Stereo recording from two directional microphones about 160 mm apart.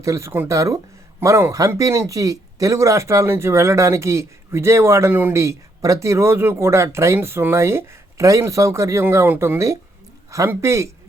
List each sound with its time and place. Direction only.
0.0 s speech: 20° right (ahead or behind)